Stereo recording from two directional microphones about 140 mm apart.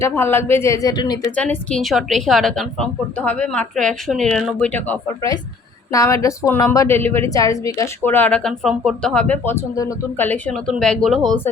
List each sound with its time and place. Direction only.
0.0 s speech: 15° left (ahead or behind)
1.4 s a woman's voice: 5° left (ahead or behind)
5.9 s a woman's voice: 20° left (ahead or behind); by 11.3 s centre (ahead or behind)